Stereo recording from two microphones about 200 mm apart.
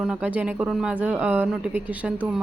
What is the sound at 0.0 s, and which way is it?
A woman's voice, 5° right (ahead or behind).